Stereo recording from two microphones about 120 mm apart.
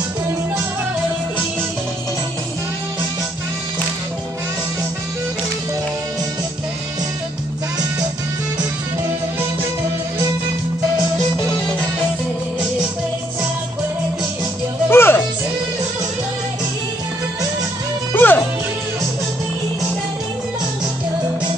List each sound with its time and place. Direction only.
14.9 s music: 20° left (ahead or behind)
18.1 s music: 15° left (ahead or behind)